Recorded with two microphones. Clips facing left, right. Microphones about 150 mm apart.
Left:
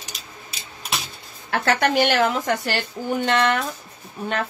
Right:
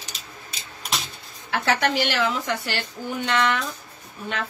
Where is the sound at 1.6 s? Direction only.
55° left (ahead or behind).